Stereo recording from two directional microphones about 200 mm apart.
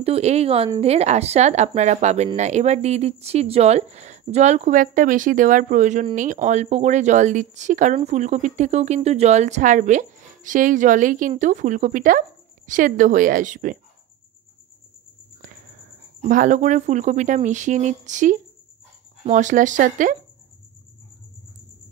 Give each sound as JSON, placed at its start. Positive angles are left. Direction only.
{"t": 0.0, "sound": "a woman's voice", "side_deg": -30}
{"t": 16.2, "sound": "speech", "side_deg": -40}